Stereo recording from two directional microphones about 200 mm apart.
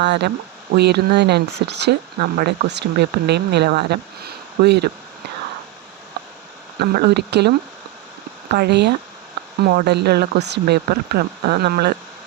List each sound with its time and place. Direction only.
0.0 s speech: 60° right (ahead or behind)
6.7 s speech: 50° right (ahead or behind)